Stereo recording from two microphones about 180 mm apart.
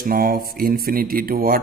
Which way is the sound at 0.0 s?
55° right (ahead or behind).